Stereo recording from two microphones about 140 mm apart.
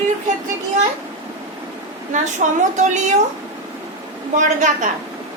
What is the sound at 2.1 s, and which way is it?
A woman's voice, 60° right (ahead or behind).